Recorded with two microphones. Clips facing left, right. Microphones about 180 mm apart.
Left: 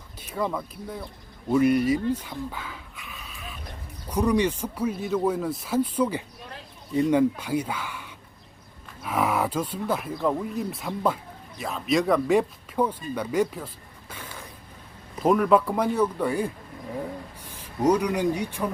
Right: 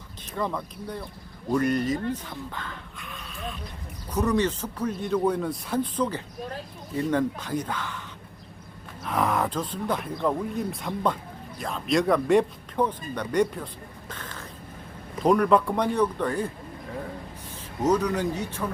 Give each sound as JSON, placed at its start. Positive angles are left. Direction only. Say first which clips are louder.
{"t": 0.3, "sound": "speech", "louder": "left 1 dB", "side_deg": 5}
{"t": 2.1, "sound": "dog", "louder": "left 2 dB", "side_deg": 10}
{"t": 4.1, "sound": "speech", "louder": "left 1 dB", "side_deg": 10}
{"t": 9.0, "sound": "speech", "louder": "even", "side_deg": 5}
{"t": 14.1, "sound": "a sound", "louder": "even", "side_deg": 10}
{"t": 15.2, "sound": "speech", "louder": "even", "side_deg": 5}
{"t": 17.5, "sound": "speech", "louder": "left 2 dB", "side_deg": 10}